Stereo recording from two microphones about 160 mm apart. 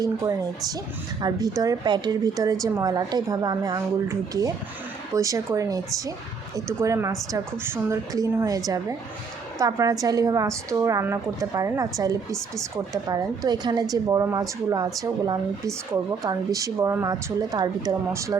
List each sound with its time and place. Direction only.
0.0 s a woman's voice: 25° right (ahead or behind)